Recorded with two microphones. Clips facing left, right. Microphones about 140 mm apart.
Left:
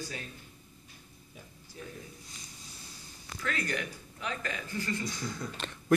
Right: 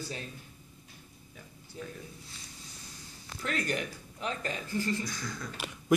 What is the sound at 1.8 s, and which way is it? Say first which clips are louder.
Speech: right 3 dB; 25° right (ahead or behind).